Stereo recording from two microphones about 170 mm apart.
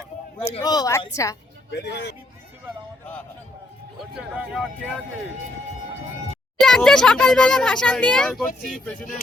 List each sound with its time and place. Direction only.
0.6 s a woman's voice: 20° left (ahead or behind)
1.7 s a man's voice: 80° left
3.9 s a child's voice: centre (ahead or behind)
6.6 s a child's voice: centre (ahead or behind)